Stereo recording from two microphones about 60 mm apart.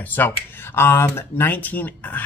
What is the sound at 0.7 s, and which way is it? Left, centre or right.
Speech, left.